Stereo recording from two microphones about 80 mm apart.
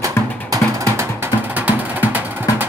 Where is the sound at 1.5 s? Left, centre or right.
Right.